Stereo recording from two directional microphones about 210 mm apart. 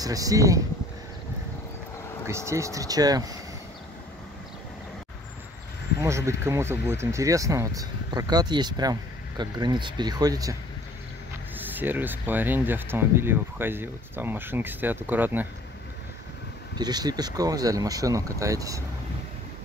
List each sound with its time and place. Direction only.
0.0 s speech: 15° right (ahead or behind)
2.2 s speech: 15° right (ahead or behind)
5.9 s speech: 15° right (ahead or behind)
16.7 s speech: 20° right (ahead or behind)